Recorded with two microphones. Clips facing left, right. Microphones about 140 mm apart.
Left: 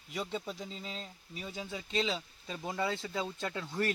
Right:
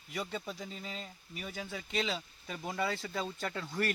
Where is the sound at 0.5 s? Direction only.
20° left (ahead or behind).